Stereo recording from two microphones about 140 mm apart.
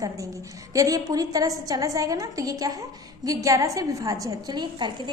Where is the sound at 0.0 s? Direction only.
25° right (ahead or behind).